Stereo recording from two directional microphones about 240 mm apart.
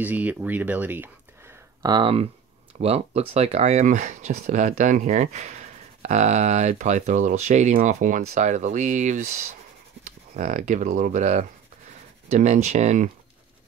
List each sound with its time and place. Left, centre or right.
0.0 s speech: centre; by 13.1 s right